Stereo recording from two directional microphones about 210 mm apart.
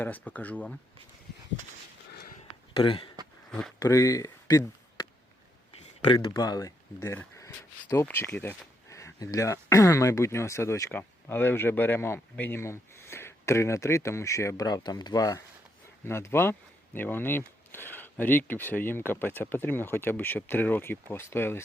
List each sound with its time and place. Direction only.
0.0 s speech: 10° left (ahead or behind)
2.7 s speech: 25° left (ahead or behind)
3.8 s a sound: 15° left (ahead or behind)
6.1 s speech: 20° left (ahead or behind)